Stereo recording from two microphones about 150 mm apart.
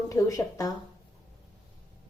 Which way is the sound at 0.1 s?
20° left (ahead or behind).